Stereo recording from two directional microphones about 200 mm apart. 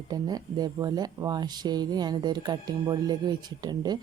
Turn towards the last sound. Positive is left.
turn(degrees=-20)  # may be behind; listen again after turning